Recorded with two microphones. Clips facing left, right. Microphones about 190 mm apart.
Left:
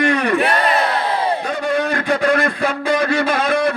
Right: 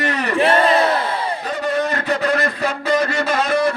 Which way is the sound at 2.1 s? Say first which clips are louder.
Left 4 dB; 55° left (ahead or behind).